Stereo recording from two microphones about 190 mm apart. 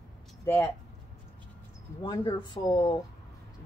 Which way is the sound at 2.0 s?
20° left (ahead or behind).